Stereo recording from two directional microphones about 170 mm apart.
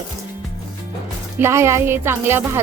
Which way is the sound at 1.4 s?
15° right (ahead or behind).